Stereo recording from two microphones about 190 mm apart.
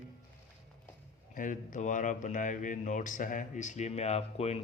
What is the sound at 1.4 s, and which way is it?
Speech, 45° left (ahead or behind).